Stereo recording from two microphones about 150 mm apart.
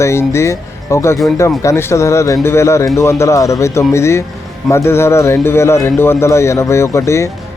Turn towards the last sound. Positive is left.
turn(degrees=20)  # may be behind; listen again after turning